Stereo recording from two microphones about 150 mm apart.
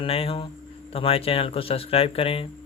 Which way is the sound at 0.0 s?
40° left (ahead or behind).